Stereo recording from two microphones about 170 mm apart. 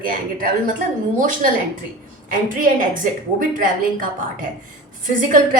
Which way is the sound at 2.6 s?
55° right (ahead or behind).